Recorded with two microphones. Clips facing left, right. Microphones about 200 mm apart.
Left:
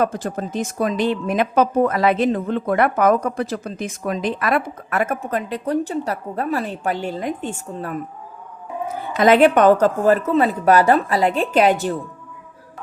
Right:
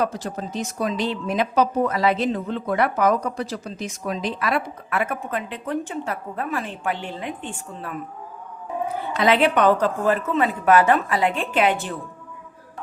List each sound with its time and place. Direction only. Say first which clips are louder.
0.0 s a woman's voice: left 4 dB; 50° left (ahead or behind)
9.2 s a woman's voice: left 5 dB; 45° left (ahead or behind)